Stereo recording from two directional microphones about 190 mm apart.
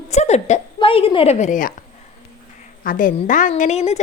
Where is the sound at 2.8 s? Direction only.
45° left (ahead or behind).